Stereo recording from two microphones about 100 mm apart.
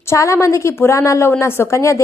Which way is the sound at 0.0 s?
30° left (ahead or behind).